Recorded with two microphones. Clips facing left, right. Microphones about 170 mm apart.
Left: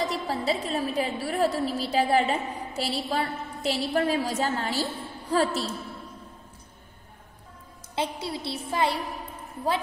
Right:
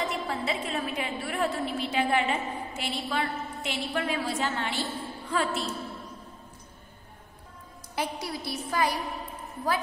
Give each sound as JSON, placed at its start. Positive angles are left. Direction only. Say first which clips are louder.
{"t": 0.0, "sound": "a woman's voice", "louder": "left 3 dB", "side_deg": 40}
{"t": 7.9, "sound": "a woman's voice", "louder": "left 2 dB", "side_deg": 25}